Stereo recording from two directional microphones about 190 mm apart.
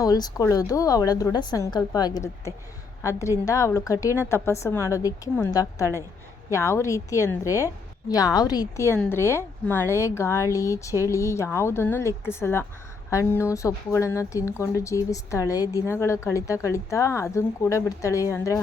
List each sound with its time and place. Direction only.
0.0 s a woman's voice: 20° left (ahead or behind)